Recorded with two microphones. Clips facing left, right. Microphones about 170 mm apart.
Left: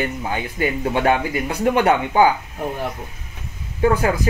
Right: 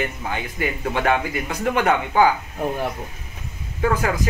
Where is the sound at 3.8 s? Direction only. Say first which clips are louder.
Left 4 dB; 25° left (ahead or behind).